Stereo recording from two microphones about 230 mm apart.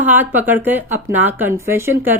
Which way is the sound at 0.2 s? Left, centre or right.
Centre.